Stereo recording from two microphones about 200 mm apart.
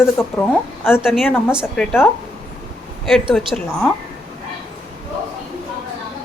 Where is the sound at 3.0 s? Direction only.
Centre (ahead or behind).